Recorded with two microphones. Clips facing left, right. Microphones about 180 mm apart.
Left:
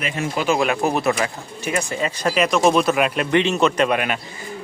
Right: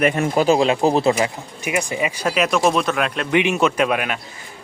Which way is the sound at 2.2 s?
Centre (ahead or behind).